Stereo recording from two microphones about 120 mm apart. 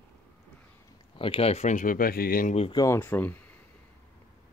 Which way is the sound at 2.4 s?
65° left (ahead or behind).